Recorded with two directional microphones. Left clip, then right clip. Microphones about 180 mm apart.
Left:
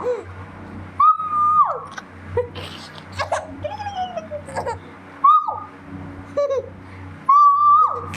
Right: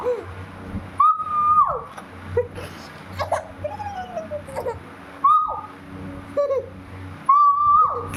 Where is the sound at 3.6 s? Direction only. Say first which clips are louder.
Left 5 dB; 15° right (ahead or behind).